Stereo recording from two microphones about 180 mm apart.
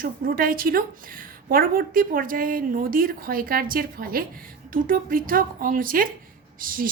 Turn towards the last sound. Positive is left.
turn(degrees=-50)  # may be behind; listen again after turning